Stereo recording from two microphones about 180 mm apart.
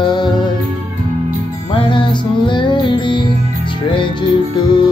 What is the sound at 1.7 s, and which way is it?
Music, 25° left (ahead or behind).